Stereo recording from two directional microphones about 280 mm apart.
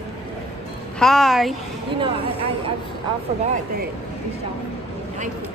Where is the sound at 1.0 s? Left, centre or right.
Centre.